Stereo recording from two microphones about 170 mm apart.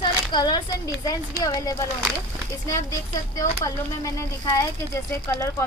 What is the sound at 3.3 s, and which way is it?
Speech, 20° left (ahead or behind).